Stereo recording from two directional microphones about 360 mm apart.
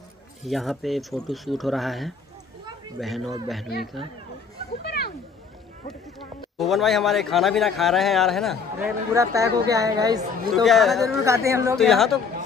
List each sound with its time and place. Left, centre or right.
0.4 s a man's voice: centre
4.8 s a sound: left
6.6 s a man's voice: centre
10.5 s a man's voice: centre